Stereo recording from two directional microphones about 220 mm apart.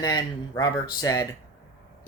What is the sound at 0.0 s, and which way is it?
Speech, 15° left (ahead or behind).